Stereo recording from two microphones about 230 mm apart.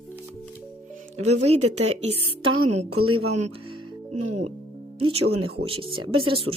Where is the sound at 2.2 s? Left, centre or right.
Right.